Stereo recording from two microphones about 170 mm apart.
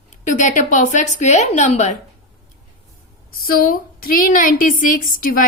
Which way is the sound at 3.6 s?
55° left (ahead or behind).